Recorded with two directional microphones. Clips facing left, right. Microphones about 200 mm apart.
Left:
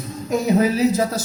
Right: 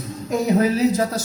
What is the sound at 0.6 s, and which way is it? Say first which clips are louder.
Speech: even; 5° left (ahead or behind).